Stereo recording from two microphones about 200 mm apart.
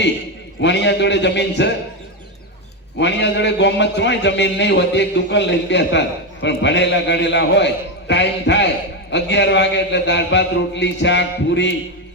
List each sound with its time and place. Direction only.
0.6 s a man's voice: 60° left (ahead or behind)
3.0 s a man's voice: 60° left (ahead or behind)